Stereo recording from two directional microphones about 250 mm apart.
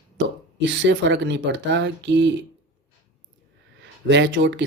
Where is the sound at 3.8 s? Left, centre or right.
Right.